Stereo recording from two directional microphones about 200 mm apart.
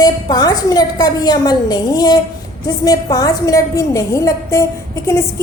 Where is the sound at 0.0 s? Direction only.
20° left (ahead or behind).